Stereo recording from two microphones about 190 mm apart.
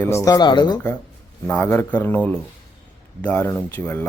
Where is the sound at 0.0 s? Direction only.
15° left (ahead or behind).